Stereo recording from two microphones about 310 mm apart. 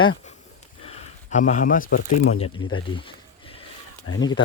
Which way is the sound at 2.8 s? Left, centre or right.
Centre.